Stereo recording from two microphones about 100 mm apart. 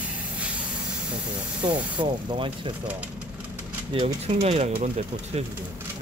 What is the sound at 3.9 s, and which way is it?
Speech, 65° right (ahead or behind).